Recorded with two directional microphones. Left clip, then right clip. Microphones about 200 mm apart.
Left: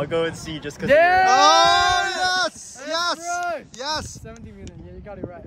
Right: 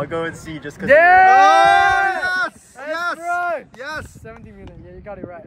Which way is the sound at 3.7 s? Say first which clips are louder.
Left 2 dB; 10° left (ahead or behind).